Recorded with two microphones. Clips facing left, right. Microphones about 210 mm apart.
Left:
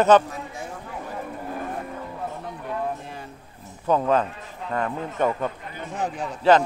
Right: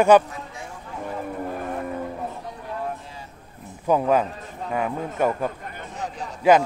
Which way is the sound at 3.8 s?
10° right (ahead or behind).